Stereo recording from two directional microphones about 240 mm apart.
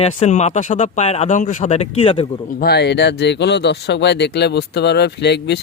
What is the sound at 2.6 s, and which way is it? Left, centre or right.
Speech, left.